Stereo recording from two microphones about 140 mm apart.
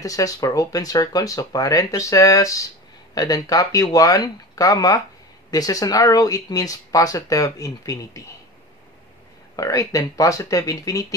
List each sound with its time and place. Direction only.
0.0 s speech: 25° left (ahead or behind)
9.6 s speech: 25° left (ahead or behind)